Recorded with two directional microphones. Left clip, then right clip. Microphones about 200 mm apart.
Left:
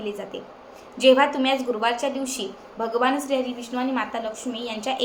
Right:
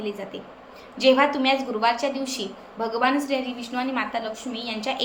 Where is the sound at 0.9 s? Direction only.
10° left (ahead or behind).